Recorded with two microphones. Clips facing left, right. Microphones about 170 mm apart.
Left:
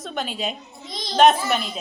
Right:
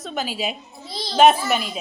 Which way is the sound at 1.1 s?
5° right (ahead or behind).